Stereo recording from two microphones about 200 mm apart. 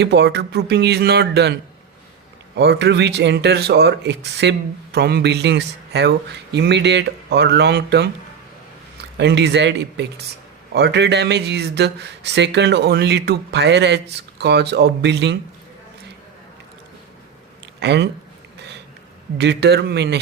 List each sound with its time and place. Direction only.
0.0 s speech: 55° right (ahead or behind)
2.6 s speech: 55° right (ahead or behind)
9.1 s speech: 60° right (ahead or behind)
17.7 s speech: 60° right (ahead or behind)
19.4 s speech: 55° right (ahead or behind)